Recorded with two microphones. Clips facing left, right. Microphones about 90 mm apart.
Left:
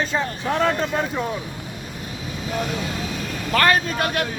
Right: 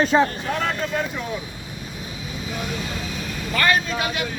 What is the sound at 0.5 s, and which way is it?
Speech, 35° left (ahead or behind).